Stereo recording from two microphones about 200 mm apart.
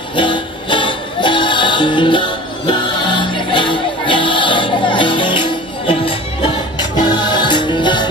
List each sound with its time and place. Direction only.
0.1 s music: 25° left (ahead or behind)